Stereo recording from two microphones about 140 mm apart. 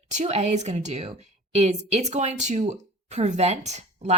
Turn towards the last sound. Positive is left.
turn(degrees=-55)  # may be behind; listen again after turning